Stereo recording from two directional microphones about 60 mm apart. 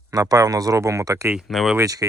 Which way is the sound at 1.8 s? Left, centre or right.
Right.